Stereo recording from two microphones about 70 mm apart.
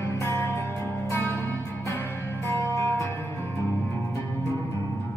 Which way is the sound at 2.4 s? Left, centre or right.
Left.